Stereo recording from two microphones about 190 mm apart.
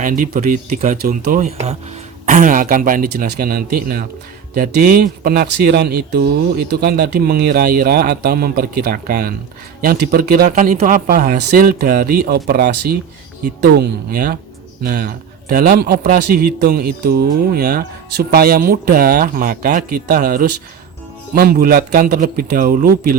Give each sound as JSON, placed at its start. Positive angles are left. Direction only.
{"t": 0.0, "sound": "a man's voice", "side_deg": -45}